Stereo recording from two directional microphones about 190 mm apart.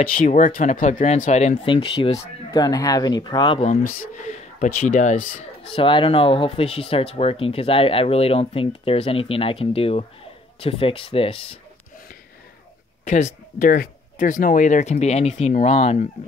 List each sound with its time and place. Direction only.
0.0 s speech: 40° left (ahead or behind); by 3.5 s 20° left (ahead or behind)
4.2 s speech: 40° left (ahead or behind)
13.1 s speech: 40° left (ahead or behind)